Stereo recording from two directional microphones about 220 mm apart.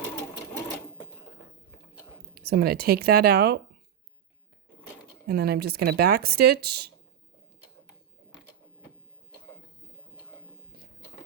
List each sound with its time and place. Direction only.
2.4 s speech: 45° right (ahead or behind)
5.3 s speech: 45° right (ahead or behind)